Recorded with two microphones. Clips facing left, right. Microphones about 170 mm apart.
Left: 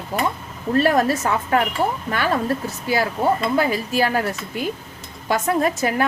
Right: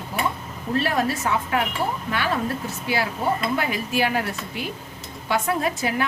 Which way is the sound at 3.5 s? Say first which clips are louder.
Left 4 dB; 40° left (ahead or behind).